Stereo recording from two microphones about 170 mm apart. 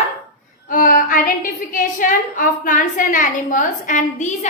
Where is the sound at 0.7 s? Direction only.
55° left (ahead or behind).